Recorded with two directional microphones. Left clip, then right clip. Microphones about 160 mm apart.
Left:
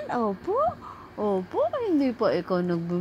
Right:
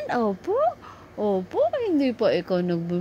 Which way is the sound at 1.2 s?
40° right (ahead or behind).